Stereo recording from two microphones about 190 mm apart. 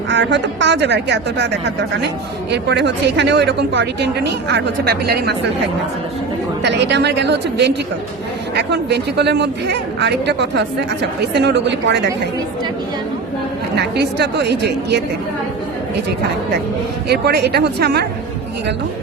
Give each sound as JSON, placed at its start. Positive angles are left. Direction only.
{"t": 0.1, "sound": "a woman's voice", "side_deg": -65}
{"t": 2.5, "sound": "a woman's voice", "side_deg": -65}
{"t": 6.6, "sound": "a woman's voice", "side_deg": -65}
{"t": 13.7, "sound": "a woman's voice", "side_deg": -60}
{"t": 17.1, "sound": "a woman's voice", "side_deg": -60}